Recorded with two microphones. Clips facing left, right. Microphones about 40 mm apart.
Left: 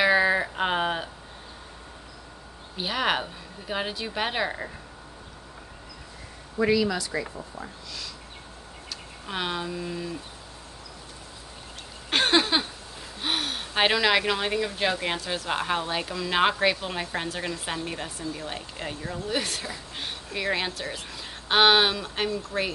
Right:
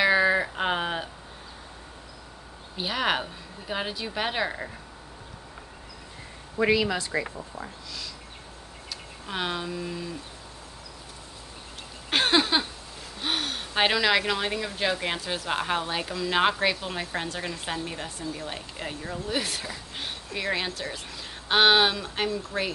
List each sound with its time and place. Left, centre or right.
0.0 s a sound: centre
2.8 s speech: centre
6.6 s speech: right
7.6 s speech: centre
9.2 s speech: centre
12.1 s a sound: centre
13.2 s speech: centre